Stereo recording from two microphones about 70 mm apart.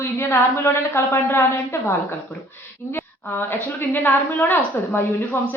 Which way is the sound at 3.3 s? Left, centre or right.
Left.